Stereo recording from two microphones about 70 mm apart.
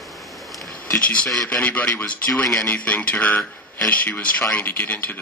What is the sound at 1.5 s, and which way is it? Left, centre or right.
Speech, left.